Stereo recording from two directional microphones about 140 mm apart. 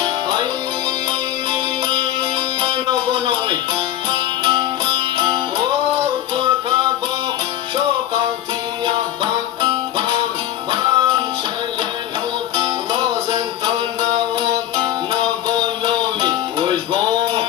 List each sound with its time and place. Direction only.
0.0 s music: 30° right (ahead or behind)
2.6 s music: 35° right (ahead or behind)
8.8 s music: 30° right (ahead or behind)
12.5 s music: 30° right (ahead or behind)
15.8 s music: 35° right (ahead or behind)